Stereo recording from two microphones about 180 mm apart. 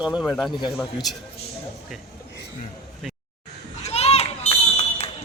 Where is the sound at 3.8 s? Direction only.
35° left (ahead or behind).